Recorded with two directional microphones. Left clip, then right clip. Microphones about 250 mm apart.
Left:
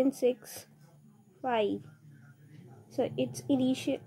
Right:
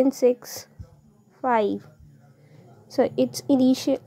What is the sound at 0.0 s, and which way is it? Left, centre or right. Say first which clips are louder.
A woman's voice: right 8 dB; right.